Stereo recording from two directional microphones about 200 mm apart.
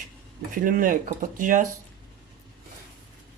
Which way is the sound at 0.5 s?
45° right (ahead or behind).